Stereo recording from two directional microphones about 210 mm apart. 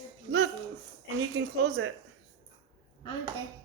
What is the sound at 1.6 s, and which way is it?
Speech, 55° right (ahead or behind).